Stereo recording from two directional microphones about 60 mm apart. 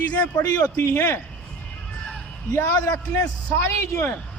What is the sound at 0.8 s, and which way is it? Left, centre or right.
Speech, left.